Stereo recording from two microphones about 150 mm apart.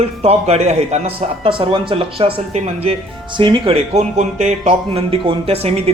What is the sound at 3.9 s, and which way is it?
Speech, 50° right (ahead or behind).